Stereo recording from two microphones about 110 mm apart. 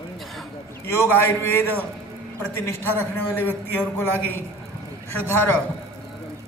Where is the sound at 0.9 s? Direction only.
25° left (ahead or behind).